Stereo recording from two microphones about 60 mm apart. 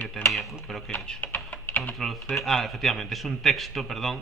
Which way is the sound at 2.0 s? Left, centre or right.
Centre.